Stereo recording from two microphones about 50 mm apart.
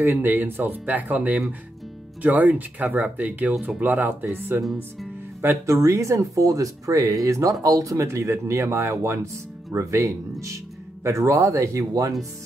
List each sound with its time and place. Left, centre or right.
0.2 s speech: right
5.7 s speech: right